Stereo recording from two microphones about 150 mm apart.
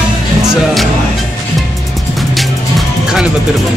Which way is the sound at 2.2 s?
Centre (ahead or behind).